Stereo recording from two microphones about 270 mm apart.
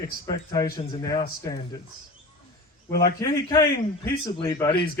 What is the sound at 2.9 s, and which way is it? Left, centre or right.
A man's voice, centre.